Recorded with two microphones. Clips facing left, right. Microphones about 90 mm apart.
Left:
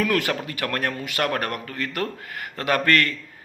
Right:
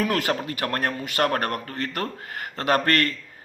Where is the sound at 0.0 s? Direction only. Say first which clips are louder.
Left 1 dB; 30° right (ahead or behind).